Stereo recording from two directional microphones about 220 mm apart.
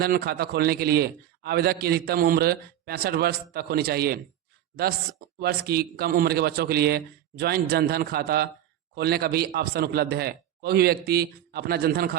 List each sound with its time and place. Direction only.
0.0 s a man's voice: 45° right (ahead or behind)
5.4 s a man's voice: 45° right (ahead or behind)